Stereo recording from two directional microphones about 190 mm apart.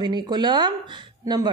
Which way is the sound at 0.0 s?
20° right (ahead or behind).